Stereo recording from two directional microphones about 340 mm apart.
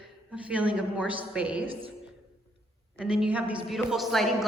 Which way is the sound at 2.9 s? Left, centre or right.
Centre.